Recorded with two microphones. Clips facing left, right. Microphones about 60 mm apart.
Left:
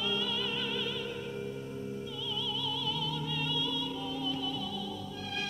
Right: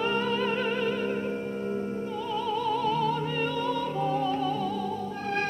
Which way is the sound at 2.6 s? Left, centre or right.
Right.